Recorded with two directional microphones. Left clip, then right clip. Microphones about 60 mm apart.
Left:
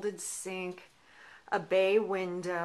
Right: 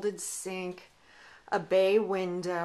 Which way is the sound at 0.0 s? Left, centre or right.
Centre.